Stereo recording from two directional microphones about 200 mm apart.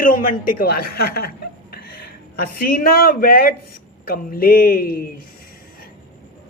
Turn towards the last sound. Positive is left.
turn(degrees=45)  # may be behind; listen again after turning